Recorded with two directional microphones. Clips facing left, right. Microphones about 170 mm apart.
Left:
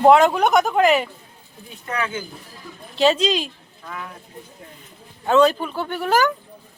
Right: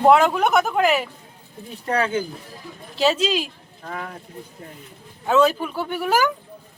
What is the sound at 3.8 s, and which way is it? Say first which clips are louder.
Speech: right 2 dB; 40° right (ahead or behind).